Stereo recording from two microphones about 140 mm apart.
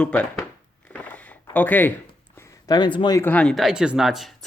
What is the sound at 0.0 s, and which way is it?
Speech, 10° left (ahead or behind).